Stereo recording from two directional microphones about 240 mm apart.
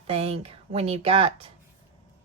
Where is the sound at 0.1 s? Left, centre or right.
Right.